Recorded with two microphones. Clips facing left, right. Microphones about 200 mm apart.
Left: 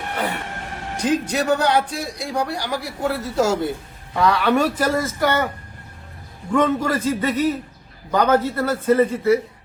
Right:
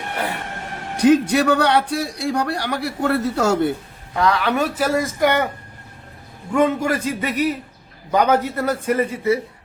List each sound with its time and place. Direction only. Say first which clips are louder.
1.0 s a man's voice: right 6 dB; 65° right (ahead or behind)
4.1 s a man's voice: left 1 dB; centre (ahead or behind); by 5.5 s 15° right (ahead or behind)
6.5 s a man's voice: right 1 dB; 10° right (ahead or behind)